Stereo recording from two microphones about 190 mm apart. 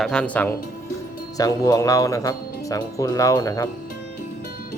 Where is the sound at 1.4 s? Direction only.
20° left (ahead or behind).